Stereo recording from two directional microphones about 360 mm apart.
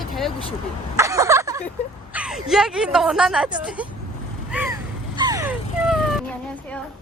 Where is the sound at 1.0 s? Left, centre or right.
Centre.